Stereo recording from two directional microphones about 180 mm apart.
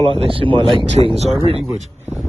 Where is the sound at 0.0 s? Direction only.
30° right (ahead or behind).